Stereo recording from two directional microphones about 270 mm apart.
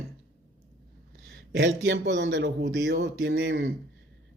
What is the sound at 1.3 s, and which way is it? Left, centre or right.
Speech, right.